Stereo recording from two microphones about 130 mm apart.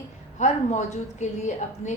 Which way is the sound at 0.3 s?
65° left (ahead or behind).